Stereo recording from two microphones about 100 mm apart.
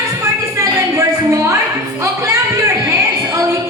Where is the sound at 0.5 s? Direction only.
30° right (ahead or behind).